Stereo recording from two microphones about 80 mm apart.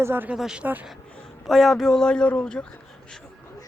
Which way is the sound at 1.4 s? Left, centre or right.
Centre.